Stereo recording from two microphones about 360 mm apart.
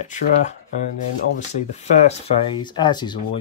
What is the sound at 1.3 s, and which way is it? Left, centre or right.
Speech, centre.